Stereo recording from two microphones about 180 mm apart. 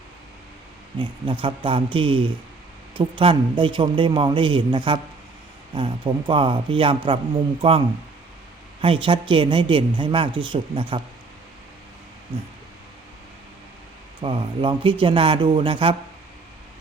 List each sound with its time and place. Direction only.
0.9 s a man's voice: 25° right (ahead or behind)
8.8 s a man's voice: 30° right (ahead or behind)
14.2 s a man's voice: 30° right (ahead or behind)